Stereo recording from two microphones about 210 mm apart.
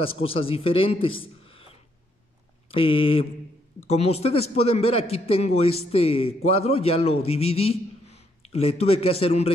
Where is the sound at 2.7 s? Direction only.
25° left (ahead or behind).